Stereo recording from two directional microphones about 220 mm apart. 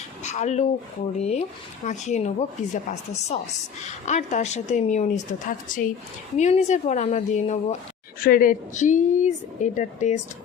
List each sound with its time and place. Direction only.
0.2 s a woman's voice: 30° left (ahead or behind)